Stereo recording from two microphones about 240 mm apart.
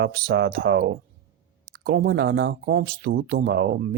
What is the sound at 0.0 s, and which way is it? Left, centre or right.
Speech, right.